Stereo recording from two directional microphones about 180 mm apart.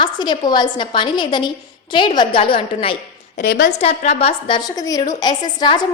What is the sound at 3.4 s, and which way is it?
Speech, 55° left (ahead or behind).